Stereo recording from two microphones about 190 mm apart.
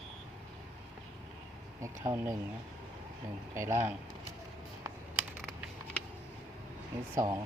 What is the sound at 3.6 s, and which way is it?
Speech, 15° right (ahead or behind).